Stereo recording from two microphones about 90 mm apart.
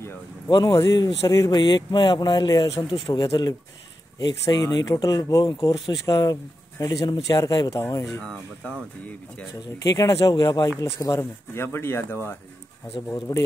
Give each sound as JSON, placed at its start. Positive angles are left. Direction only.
{"t": 0.5, "sound": "speech", "side_deg": 60}
{"t": 1.2, "sound": "speech", "side_deg": 35}
{"t": 1.5, "sound": "speech", "side_deg": 55}
{"t": 4.6, "sound": "speech", "side_deg": 40}
{"t": 8.2, "sound": "speech", "side_deg": 10}
{"t": 9.8, "sound": "speech", "side_deg": 40}
{"t": 10.8, "sound": "speech", "side_deg": 40}